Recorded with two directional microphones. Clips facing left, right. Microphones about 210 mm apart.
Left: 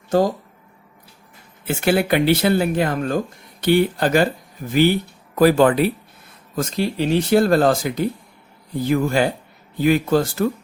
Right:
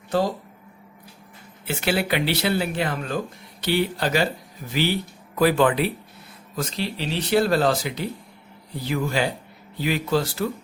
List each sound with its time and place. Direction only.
1.6 s speech: 50° left (ahead or behind)